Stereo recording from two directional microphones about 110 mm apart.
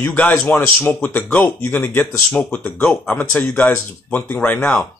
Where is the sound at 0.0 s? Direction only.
15° left (ahead or behind).